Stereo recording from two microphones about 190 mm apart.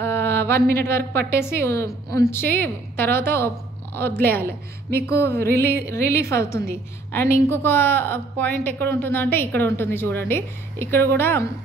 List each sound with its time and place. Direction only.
0.0 s a sound: 15° left (ahead or behind)
0.6 s a woman's voice: 55° right (ahead or behind)
0.8 s a woman's voice: 15° left (ahead or behind)